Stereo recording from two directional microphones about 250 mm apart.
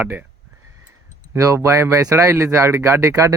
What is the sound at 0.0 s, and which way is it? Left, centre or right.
Speech, centre.